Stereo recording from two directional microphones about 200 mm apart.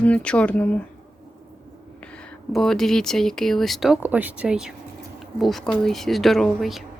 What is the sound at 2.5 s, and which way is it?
Speech, centre (ahead or behind).